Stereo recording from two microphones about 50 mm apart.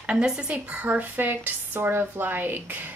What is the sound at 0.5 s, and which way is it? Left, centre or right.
Speech, right.